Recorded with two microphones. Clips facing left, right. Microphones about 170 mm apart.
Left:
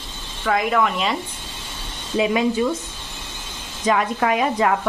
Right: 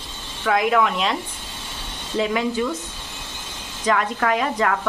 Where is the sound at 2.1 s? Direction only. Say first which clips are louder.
Left 3 dB; 20° left (ahead or behind).